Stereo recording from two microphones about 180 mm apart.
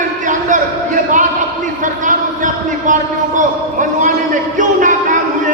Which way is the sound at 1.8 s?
45° right (ahead or behind).